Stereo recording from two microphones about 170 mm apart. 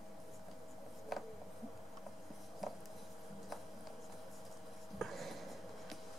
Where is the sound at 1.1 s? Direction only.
Centre (ahead or behind).